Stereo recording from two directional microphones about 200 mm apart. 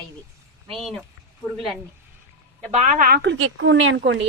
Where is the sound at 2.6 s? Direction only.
35° right (ahead or behind).